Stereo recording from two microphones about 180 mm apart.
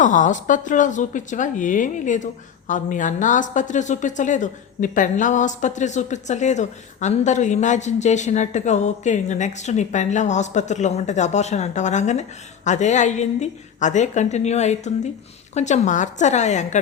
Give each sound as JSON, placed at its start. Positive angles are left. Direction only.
{"t": 0.0, "sound": "a woman's voice", "side_deg": 45}